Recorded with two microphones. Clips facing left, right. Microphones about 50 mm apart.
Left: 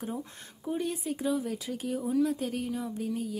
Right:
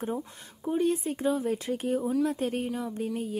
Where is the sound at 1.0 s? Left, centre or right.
Right.